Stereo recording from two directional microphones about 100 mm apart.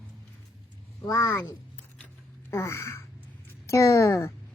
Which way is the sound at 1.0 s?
35° left (ahead or behind).